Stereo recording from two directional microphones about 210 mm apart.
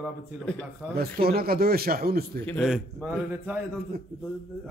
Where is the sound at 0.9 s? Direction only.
45° right (ahead or behind).